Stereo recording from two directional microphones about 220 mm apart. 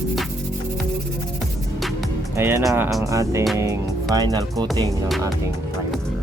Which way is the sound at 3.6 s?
15° right (ahead or behind).